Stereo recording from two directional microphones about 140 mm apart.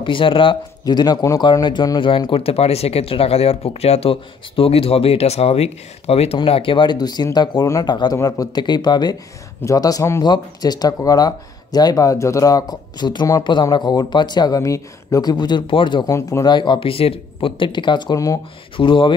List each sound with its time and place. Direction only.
0.0 s speech: 35° left (ahead or behind)
16.1 s speech: 20° left (ahead or behind)
16.4 s speech: 35° left (ahead or behind)
18.8 s speech: 35° left (ahead or behind)